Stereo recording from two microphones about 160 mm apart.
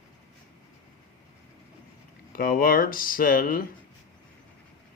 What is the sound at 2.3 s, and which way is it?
Speech, 65° left (ahead or behind).